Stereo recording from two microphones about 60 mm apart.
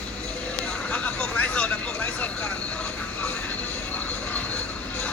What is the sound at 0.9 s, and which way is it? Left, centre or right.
Vehicle, left.